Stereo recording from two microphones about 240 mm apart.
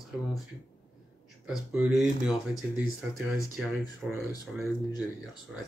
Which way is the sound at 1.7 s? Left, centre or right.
Centre.